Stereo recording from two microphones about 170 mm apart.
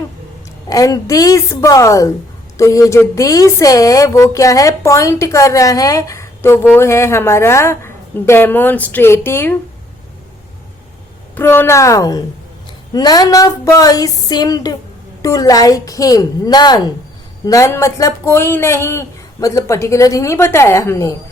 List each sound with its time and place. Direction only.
0.7 s speech: 20° left (ahead or behind)
11.3 s speech: 15° left (ahead or behind)